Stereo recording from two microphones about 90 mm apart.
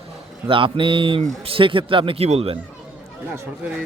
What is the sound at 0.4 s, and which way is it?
A man's voice, 75° right (ahead or behind).